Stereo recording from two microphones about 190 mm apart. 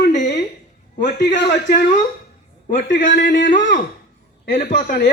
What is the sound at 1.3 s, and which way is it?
Speech, 55° left (ahead or behind).